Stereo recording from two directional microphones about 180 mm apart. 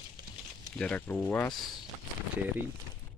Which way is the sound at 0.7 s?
5° left (ahead or behind).